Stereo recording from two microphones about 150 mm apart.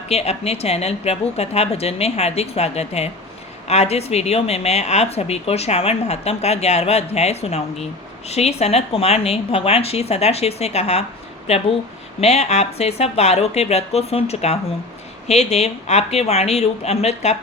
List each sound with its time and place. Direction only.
0.1 s a woman's voice: 45° left (ahead or behind)